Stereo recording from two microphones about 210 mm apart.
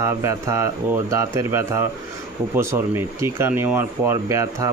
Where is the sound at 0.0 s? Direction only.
15° right (ahead or behind).